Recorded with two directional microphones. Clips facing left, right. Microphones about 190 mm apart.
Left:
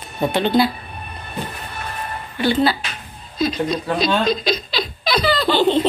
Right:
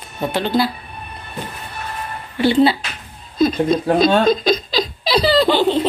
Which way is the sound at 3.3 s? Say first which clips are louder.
Right 5 dB; 50° right (ahead or behind).